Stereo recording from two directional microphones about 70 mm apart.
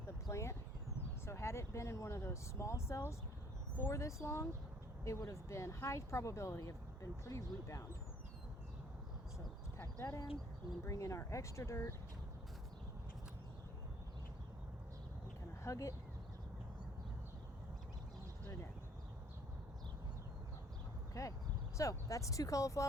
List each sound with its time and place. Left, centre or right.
0.0 s a sound: left
1.2 s speech: left
9.7 s speech: left
15.6 s speech: left
21.1 s a sound: left
21.8 s speech: left